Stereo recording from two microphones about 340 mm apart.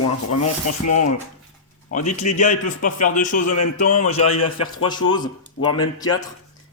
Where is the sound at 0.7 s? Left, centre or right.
Left.